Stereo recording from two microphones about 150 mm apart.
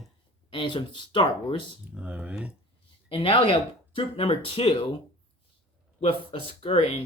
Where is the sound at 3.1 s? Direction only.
35° left (ahead or behind).